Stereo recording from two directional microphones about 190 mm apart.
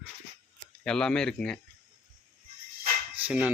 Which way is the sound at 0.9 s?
5° left (ahead or behind).